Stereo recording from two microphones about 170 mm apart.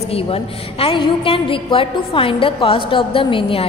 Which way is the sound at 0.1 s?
35° left (ahead or behind).